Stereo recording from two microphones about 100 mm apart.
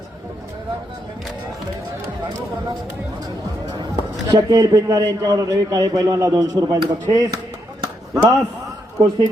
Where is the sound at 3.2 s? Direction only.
45° right (ahead or behind).